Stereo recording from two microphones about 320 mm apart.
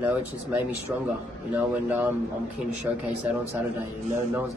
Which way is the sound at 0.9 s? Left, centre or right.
Centre.